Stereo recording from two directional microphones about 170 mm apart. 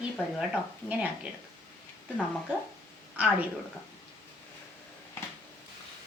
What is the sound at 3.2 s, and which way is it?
Speech, 10° right (ahead or behind).